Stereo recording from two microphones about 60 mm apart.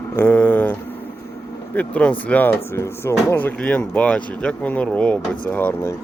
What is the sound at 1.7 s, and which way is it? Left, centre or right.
Speech, left.